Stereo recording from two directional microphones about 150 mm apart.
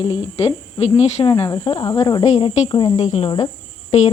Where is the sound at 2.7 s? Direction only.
30° left (ahead or behind).